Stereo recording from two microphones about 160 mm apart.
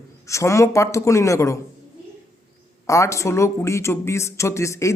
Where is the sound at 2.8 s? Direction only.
20° left (ahead or behind).